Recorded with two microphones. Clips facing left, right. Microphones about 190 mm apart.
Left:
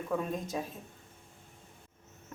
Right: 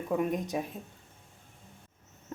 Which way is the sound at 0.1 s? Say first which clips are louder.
Right 4 dB; 15° right (ahead or behind).